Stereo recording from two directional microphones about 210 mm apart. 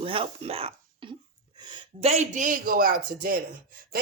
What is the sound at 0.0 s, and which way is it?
Speech, 25° right (ahead or behind).